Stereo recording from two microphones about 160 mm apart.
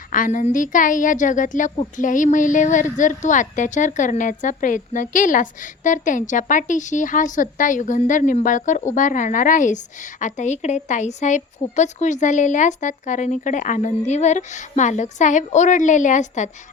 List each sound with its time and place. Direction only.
0.1 s a woman's voice: 55° left (ahead or behind)